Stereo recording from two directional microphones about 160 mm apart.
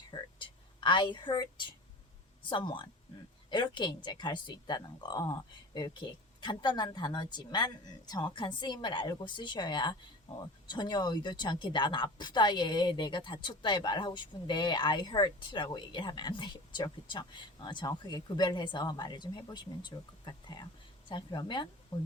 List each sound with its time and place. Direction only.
0.1 s a woman's voice: 30° left (ahead or behind)